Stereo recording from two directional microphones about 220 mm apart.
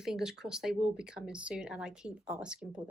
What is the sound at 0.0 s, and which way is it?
Speech, centre (ahead or behind).